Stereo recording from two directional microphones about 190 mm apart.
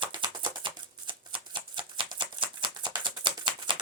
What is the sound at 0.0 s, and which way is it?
Shuffling cards, 25° right (ahead or behind).